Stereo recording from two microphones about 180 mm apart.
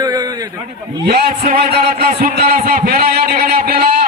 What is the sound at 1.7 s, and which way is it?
A man's voice, 55° right (ahead or behind).